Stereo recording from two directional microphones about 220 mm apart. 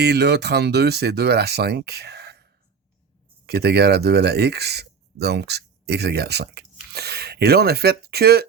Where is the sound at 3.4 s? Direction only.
45° right (ahead or behind).